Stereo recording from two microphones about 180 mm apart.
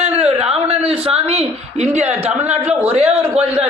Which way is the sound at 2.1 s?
10° right (ahead or behind).